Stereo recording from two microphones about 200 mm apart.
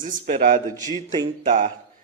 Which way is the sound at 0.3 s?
45° right (ahead or behind).